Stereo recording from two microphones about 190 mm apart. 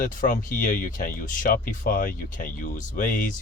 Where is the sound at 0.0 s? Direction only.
45° left (ahead or behind).